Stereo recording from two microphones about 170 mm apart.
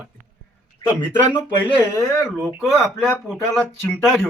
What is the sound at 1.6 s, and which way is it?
Speech, 25° left (ahead or behind).